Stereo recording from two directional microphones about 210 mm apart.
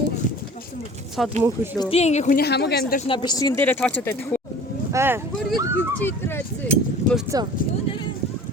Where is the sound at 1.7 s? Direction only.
20° left (ahead or behind).